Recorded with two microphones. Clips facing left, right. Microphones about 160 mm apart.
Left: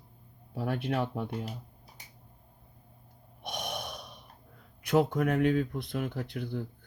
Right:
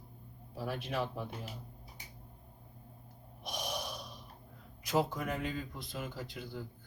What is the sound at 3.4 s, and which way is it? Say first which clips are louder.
Gasp: left 2 dB; 60° left (ahead or behind).